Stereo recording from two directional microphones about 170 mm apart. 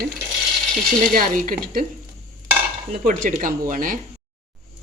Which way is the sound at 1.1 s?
55° right (ahead or behind).